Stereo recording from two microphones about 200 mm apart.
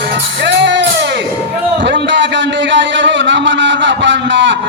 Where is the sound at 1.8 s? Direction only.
65° right (ahead or behind).